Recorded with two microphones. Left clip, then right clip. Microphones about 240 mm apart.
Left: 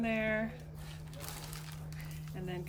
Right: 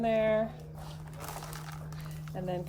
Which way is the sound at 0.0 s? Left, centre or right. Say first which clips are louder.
Right 7 dB; centre.